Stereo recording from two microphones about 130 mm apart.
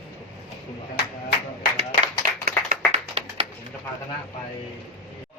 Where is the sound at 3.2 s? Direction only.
50° right (ahead or behind).